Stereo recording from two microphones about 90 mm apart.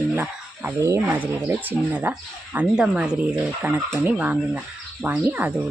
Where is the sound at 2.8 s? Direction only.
10° right (ahead or behind).